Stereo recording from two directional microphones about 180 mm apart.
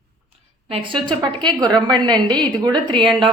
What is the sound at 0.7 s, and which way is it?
A woman's voice, 25° right (ahead or behind).